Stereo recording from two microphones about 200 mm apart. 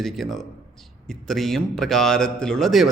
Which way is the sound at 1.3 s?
Centre (ahead or behind).